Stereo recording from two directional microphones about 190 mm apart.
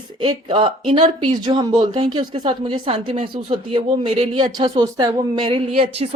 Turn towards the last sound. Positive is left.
turn(degrees=-30)  # may be behind; listen again after turning